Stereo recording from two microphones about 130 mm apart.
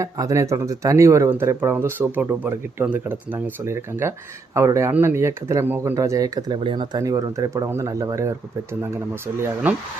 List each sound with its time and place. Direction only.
0.0 s speech: 25° right (ahead or behind)
6.6 s speech: 40° right (ahead or behind)
7.0 s speech: 25° right (ahead or behind)